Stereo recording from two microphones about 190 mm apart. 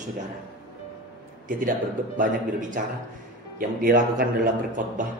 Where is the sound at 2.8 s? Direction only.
45° right (ahead or behind).